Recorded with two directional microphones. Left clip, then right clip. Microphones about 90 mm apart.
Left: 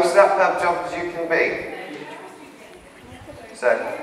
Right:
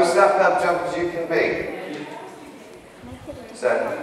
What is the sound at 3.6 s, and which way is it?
Speech, 30° left (ahead or behind).